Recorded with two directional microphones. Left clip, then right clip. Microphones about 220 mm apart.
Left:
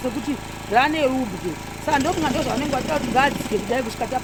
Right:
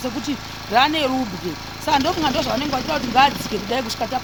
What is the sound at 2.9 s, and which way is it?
Speech, 45° right (ahead or behind).